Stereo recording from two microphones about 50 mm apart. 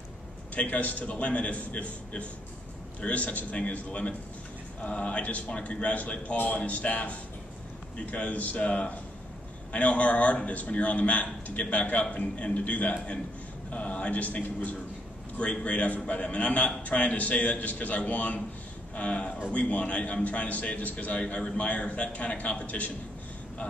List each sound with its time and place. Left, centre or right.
0.6 s a man's voice: left